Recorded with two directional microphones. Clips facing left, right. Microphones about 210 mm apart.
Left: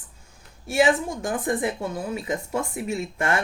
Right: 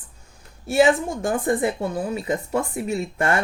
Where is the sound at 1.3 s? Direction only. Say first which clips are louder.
Right 4 dB; 35° right (ahead or behind).